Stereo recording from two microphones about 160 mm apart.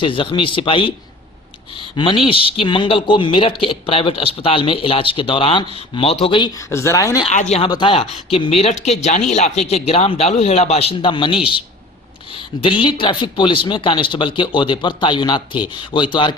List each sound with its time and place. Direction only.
0.0 s speech: 35° left (ahead or behind)
6.6 s speech: 15° left (ahead or behind)
7.5 s speech: 30° left (ahead or behind)